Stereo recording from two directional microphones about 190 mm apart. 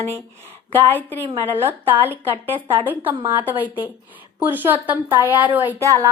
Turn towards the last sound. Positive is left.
turn(degrees=-15)  # may be behind; listen again after turning